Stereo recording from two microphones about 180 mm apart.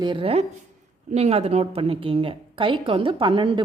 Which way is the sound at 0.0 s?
30° right (ahead or behind).